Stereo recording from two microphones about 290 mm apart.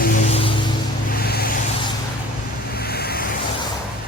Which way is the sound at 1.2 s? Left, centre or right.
Left.